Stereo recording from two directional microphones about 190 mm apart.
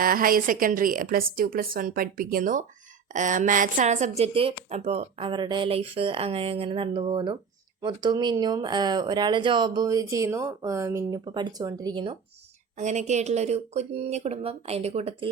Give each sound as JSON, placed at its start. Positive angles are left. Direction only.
{"t": 0.0, "sound": "a woman's voice", "side_deg": -50}
{"t": 12.7, "sound": "speech", "side_deg": -40}